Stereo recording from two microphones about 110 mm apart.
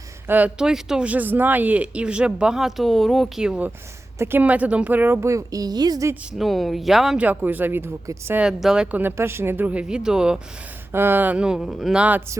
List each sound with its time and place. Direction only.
0.3 s speech: 15° right (ahead or behind)
4.2 s a woman's voice: 20° right (ahead or behind); by 6.1 s 35° right (ahead or behind)
6.4 s speech: centre (ahead or behind)
7.3 s speech: 15° right (ahead or behind)
8.4 s speech: 5° right (ahead or behind)
9.0 s speech: 20° right (ahead or behind)
10.9 s speech: 20° right (ahead or behind)